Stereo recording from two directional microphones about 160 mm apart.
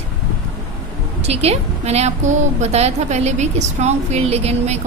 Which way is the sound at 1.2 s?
40° right (ahead or behind).